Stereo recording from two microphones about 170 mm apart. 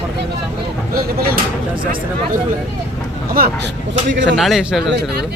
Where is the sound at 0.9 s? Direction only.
60° right (ahead or behind).